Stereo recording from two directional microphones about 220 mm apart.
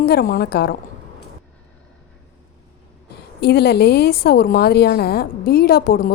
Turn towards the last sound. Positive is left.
turn(degrees=45)  # may be behind; listen again after turning